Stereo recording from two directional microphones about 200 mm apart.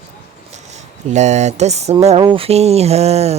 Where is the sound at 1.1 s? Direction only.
35° right (ahead or behind).